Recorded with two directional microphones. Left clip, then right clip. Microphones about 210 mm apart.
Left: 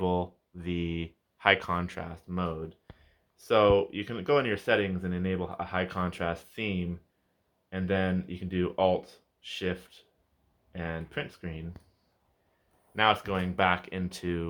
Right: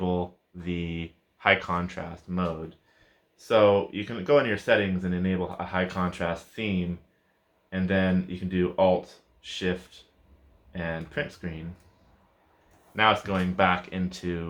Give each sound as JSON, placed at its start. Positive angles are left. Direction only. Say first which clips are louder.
{"t": 0.0, "sound": "speech", "louder": "even", "side_deg": 50}
{"t": 13.0, "sound": "speech", "louder": "right 3 dB", "side_deg": 50}